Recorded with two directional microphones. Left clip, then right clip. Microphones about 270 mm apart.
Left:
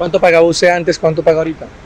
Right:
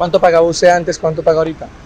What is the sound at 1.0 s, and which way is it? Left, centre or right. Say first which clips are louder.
Speech: left 2 dB; left.